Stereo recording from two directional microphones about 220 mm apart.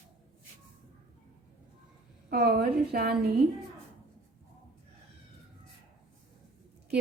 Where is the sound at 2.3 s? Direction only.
45° right (ahead or behind).